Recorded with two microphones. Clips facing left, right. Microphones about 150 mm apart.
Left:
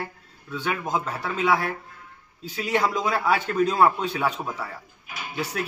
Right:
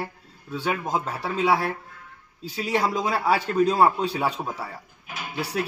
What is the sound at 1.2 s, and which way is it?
Speech, 30° right (ahead or behind).